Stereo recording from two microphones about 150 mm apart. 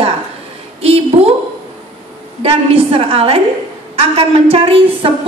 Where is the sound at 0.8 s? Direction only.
40° right (ahead or behind).